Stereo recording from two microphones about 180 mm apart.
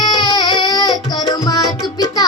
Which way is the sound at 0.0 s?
20° left (ahead or behind).